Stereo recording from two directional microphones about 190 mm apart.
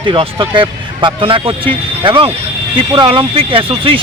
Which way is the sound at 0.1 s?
25° right (ahead or behind).